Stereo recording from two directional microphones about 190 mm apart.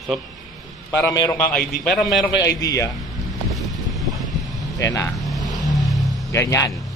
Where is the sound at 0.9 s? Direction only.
15° left (ahead or behind).